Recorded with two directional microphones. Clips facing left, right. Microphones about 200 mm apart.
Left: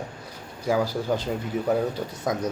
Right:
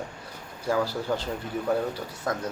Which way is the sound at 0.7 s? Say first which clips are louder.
Left 2 dB; 15° left (ahead or behind).